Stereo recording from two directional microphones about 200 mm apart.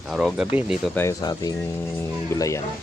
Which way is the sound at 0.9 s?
15° left (ahead or behind).